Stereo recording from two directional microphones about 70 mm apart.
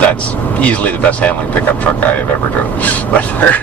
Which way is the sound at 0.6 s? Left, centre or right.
Centre.